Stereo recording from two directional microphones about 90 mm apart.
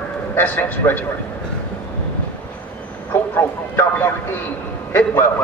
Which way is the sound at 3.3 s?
20° left (ahead or behind).